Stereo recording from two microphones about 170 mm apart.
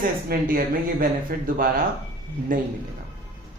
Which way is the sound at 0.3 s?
55° right (ahead or behind).